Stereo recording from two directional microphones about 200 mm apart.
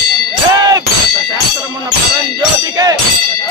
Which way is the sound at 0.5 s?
15° right (ahead or behind).